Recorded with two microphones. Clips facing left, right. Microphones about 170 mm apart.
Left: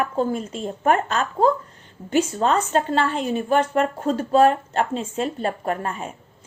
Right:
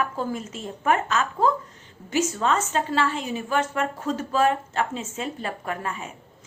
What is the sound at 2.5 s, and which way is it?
A woman's voice, 50° left (ahead or behind).